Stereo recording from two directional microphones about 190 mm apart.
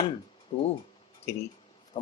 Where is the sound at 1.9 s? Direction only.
25° left (ahead or behind).